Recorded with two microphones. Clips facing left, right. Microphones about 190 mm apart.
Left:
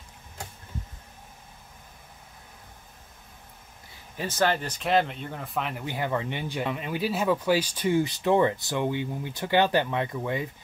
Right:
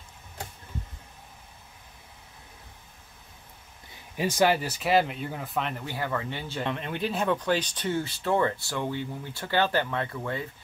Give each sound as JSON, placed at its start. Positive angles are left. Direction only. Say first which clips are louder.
{"t": 4.2, "sound": "speech", "louder": "right 2 dB", "side_deg": -10}
{"t": 5.9, "sound": "speech", "louder": "left 2 dB", "side_deg": 20}